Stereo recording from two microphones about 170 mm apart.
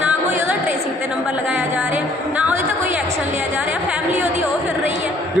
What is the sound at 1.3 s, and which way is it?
Music, 5° right (ahead or behind).